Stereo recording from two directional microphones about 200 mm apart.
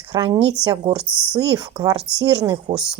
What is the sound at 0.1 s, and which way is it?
Speech, 25° right (ahead or behind).